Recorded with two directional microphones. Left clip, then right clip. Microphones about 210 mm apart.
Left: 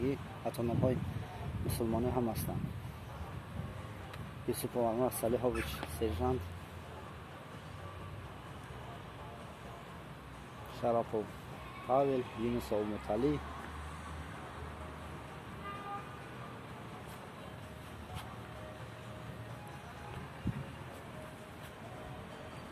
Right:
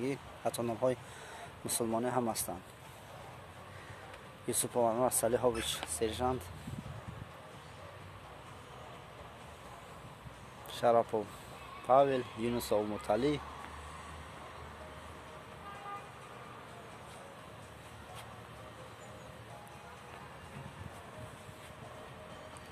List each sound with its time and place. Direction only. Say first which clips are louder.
0.0 s speech: right 1 dB; 30° right (ahead or behind)
4.5 s speech: right 3 dB; 35° right (ahead or behind)
10.7 s speech: right 5 dB; 40° right (ahead or behind)